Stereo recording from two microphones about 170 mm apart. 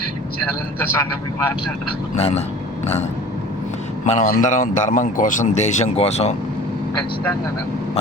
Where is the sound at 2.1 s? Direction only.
40° left (ahead or behind).